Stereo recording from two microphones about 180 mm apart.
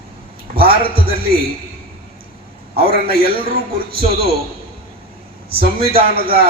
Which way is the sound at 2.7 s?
55° right (ahead or behind).